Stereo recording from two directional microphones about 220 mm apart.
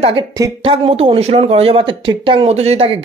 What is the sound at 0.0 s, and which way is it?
Speech, 25° right (ahead or behind).